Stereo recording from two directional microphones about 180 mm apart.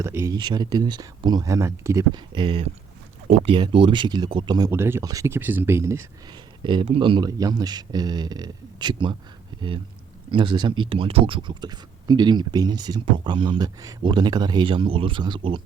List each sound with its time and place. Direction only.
0.0 s speech: 15° right (ahead or behind)
6.6 s speech: 25° right (ahead or behind)